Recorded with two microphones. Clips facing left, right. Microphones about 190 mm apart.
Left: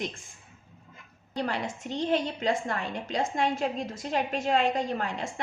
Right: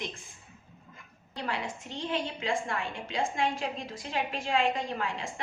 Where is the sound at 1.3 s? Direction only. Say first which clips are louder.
Left 4 dB; 40° left (ahead or behind).